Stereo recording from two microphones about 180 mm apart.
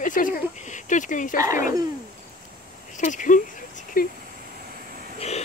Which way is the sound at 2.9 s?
45° left (ahead or behind).